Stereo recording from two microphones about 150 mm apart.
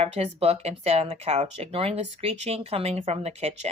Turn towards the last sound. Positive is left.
turn(degrees=-45)  # may be behind; listen again after turning